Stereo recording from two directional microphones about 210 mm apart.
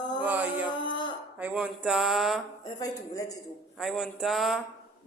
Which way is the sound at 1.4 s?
5° right (ahead or behind).